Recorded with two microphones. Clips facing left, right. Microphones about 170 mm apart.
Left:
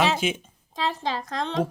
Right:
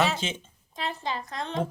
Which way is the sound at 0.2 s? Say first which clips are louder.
Left 7 dB; 10° left (ahead or behind).